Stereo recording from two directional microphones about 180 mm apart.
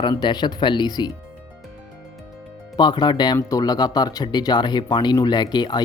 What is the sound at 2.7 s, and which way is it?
Speech, 25° left (ahead or behind).